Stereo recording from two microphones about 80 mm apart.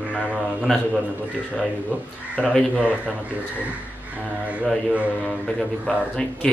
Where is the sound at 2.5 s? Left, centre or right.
Centre.